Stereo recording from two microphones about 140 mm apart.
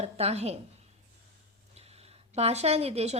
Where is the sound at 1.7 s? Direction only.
45° right (ahead or behind).